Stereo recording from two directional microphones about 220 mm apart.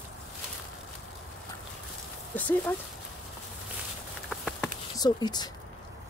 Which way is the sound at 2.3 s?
5° left (ahead or behind).